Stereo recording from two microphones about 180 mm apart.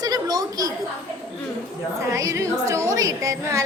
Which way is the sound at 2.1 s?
20° right (ahead or behind).